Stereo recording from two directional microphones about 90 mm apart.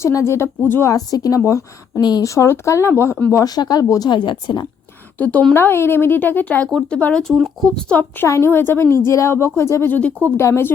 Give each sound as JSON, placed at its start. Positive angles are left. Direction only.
{"t": 0.0, "sound": "speech", "side_deg": 35}
{"t": 0.9, "sound": "speech", "side_deg": 40}
{"t": 2.2, "sound": "speech", "side_deg": 35}
{"t": 3.3, "sound": "speech", "side_deg": 45}
{"t": 4.1, "sound": "a woman's voice", "side_deg": 60}
{"t": 5.1, "sound": "a woman's voice", "side_deg": 15}
{"t": 6.7, "sound": "speech", "side_deg": 5}
{"t": 8.3, "sound": "a woman's voice", "side_deg": 30}